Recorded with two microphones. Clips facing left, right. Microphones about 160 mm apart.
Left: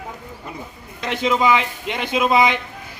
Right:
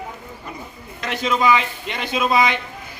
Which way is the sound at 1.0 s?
20° left (ahead or behind).